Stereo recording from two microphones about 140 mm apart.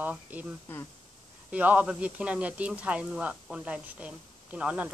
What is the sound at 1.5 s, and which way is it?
Speech, 10° right (ahead or behind).